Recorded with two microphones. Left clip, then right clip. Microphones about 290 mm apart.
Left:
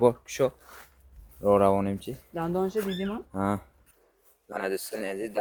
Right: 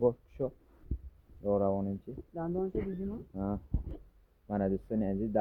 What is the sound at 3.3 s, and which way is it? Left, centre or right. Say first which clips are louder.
Speech: left 10 dB; centre.